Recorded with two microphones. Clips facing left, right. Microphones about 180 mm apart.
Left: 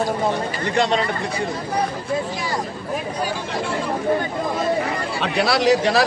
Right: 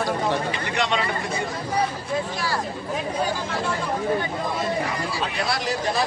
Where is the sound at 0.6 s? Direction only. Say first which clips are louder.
Left 5 dB; 35° left (ahead or behind).